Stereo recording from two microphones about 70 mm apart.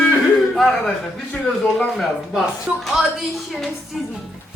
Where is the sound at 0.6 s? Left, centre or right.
Centre.